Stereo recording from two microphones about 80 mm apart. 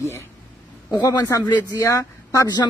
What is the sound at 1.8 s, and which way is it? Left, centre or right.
Speech, left.